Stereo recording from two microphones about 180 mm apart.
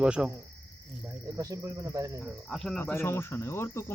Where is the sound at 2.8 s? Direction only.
15° left (ahead or behind).